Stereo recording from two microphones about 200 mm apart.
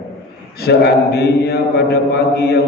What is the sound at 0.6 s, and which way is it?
A man's voice, 55° left (ahead or behind).